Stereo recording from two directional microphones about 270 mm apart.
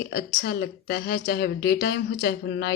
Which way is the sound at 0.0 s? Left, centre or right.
Left.